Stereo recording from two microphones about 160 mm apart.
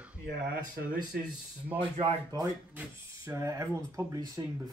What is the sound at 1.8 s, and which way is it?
Speech, 35° right (ahead or behind).